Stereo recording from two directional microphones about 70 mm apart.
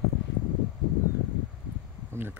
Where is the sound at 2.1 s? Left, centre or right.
Right.